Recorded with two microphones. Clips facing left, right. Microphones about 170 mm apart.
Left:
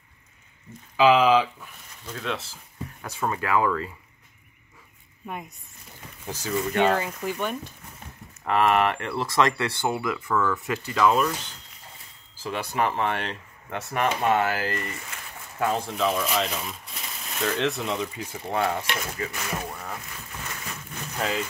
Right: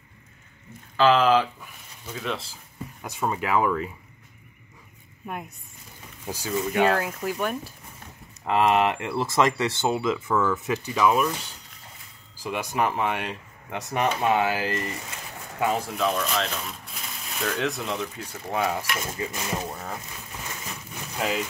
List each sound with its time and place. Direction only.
0.9 s speech: 5° left (ahead or behind); by 3.9 s 15° right (ahead or behind)
5.2 s speech: 5° right (ahead or behind)
8.5 s speech: 15° right (ahead or behind)
15.6 s speech: 5° right (ahead or behind)
18.9 s speech: 25° right (ahead or behind)